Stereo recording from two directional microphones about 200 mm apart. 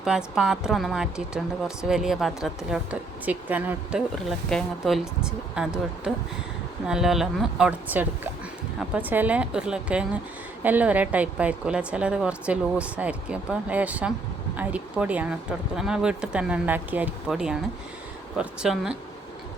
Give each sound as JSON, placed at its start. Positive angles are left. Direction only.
{"t": 0.0, "sound": "a woman's voice", "side_deg": -5}
{"t": 6.8, "sound": "a woman's voice", "side_deg": -5}